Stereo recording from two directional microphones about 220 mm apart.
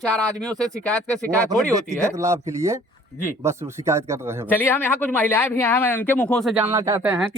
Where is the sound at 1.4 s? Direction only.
15° right (ahead or behind).